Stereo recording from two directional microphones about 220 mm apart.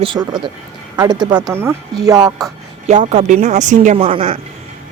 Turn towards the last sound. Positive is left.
turn(degrees=-25)  # may be behind; listen again after turning